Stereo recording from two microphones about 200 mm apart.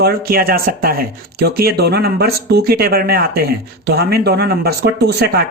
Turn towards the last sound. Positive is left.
turn(degrees=-55)  # may be behind; listen again after turning